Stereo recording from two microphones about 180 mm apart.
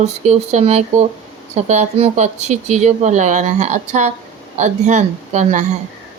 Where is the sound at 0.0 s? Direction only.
35° right (ahead or behind).